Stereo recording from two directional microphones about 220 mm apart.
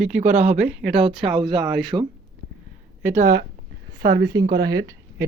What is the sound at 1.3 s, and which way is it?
Speech, 20° right (ahead or behind).